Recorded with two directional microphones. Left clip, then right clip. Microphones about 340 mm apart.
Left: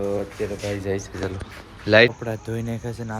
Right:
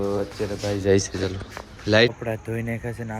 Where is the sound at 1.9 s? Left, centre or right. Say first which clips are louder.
Left 3 dB; centre.